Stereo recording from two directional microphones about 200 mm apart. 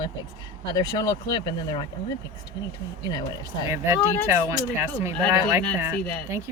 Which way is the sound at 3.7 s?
15° right (ahead or behind).